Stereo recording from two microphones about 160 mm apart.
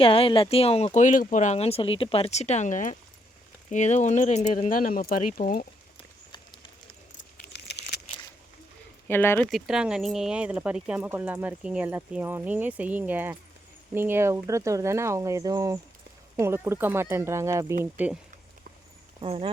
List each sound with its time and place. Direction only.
0.0 s speech: 35° left (ahead or behind); by 5.6 s 65° left (ahead or behind)
6.3 s a sound: 30° left (ahead or behind)
7.5 s a sound: 90° left
9.0 s speech: 15° left (ahead or behind)
9.5 s speech: centre (ahead or behind)
19.2 s speech: 35° right (ahead or behind)